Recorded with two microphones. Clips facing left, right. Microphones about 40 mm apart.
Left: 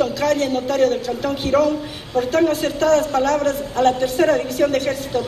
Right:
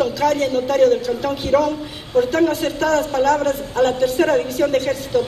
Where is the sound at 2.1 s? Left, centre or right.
Right.